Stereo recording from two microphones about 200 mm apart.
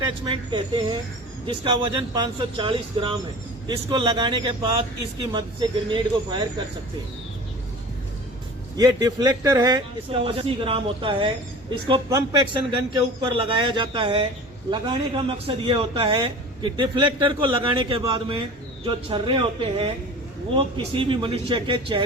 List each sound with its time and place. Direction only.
0.3 s a man's voice: 25° right (ahead or behind)
8.7 s a man's voice: 20° right (ahead or behind)